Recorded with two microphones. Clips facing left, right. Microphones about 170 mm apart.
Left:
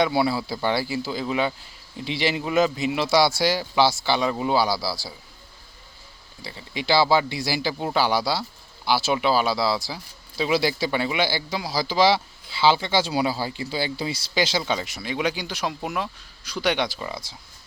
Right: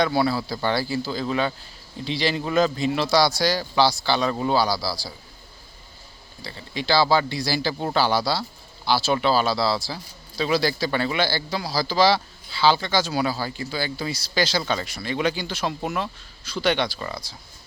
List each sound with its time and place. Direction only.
0.6 s speech: 20° left (ahead or behind)
6.4 s speech: 15° left (ahead or behind)